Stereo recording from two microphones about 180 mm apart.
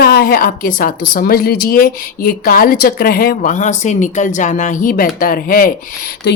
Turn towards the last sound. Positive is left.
turn(degrees=55)  # may be behind; listen again after turning